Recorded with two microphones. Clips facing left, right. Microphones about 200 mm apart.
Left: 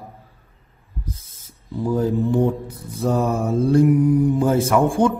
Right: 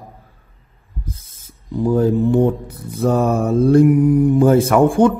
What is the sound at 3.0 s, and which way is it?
A man's voice, 65° right (ahead or behind).